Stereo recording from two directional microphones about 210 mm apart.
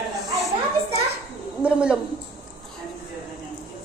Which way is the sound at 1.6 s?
5° right (ahead or behind).